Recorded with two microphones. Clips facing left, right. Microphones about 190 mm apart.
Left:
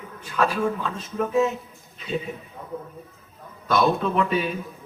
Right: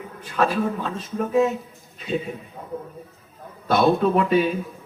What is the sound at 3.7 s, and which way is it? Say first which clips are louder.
Speech: right 3 dB; 40° right (ahead or behind).